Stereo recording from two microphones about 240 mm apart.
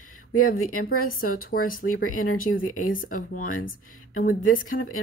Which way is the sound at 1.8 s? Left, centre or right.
Left.